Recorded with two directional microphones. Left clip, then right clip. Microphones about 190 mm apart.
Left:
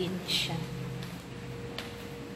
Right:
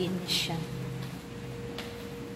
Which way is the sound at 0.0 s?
15° right (ahead or behind).